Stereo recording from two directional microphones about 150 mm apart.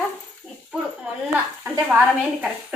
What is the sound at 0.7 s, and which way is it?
Speech, centre (ahead or behind).